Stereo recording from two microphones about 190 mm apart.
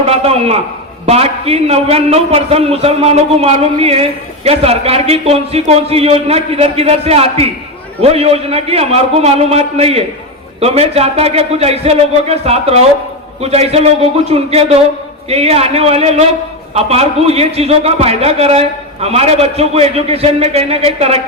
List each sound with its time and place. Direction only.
0.0 s a man's voice: 30° right (ahead or behind)